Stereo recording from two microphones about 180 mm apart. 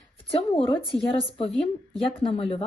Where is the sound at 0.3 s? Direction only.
30° left (ahead or behind).